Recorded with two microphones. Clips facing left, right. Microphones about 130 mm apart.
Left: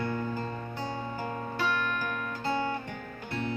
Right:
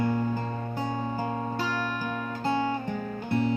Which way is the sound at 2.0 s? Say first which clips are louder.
Right 3 dB; 25° right (ahead or behind).